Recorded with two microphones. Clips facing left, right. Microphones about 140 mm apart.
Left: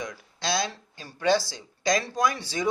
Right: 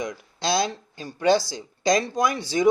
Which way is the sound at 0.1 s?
25° right (ahead or behind).